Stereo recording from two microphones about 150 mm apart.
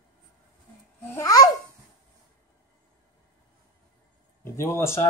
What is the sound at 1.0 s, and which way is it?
Babbling, 20° left (ahead or behind).